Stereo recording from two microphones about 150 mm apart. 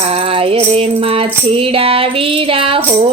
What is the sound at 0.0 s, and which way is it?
Music, 40° right (ahead or behind).